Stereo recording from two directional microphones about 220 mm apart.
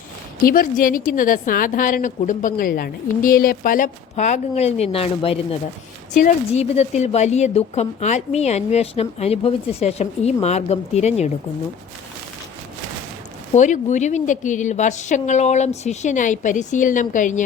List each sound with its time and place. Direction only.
0.4 s a woman's voice: 40° left (ahead or behind)
13.5 s a woman's voice: 35° left (ahead or behind)